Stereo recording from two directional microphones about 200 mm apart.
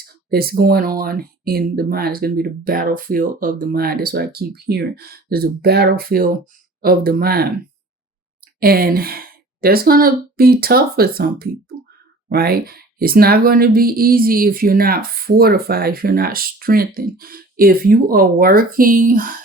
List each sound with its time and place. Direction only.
0.0 s speech: 50° right (ahead or behind)
8.6 s speech: 50° right (ahead or behind)